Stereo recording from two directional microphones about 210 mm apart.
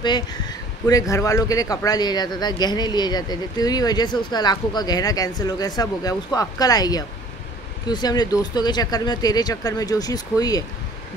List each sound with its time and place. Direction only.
0.0 s speech: 20° left (ahead or behind)